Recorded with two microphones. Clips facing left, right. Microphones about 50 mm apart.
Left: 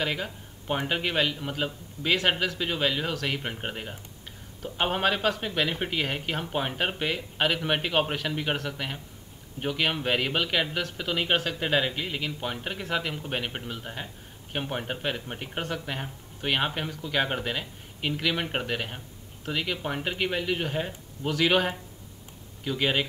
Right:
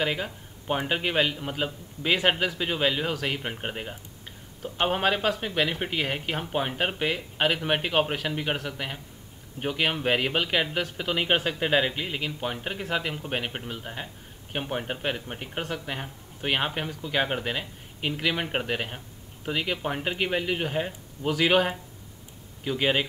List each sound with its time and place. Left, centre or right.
0.0 s speech: centre